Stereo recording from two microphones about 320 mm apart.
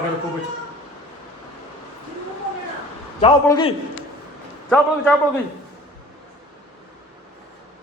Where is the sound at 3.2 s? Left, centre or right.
Centre.